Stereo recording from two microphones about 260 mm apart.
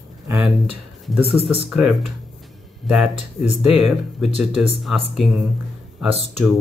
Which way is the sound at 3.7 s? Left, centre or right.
Centre.